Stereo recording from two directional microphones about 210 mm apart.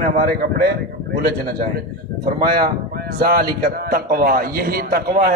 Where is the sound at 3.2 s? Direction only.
45° right (ahead or behind).